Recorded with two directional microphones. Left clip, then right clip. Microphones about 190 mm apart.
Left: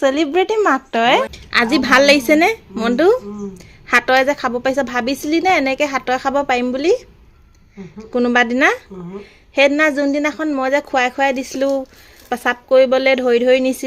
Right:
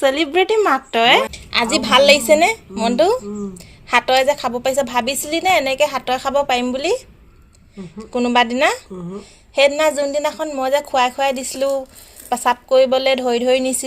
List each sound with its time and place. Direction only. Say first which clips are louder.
0.0 s a woman's voice: even; 50° left (ahead or behind)
8.1 s a woman's voice: left 1 dB; 45° left (ahead or behind)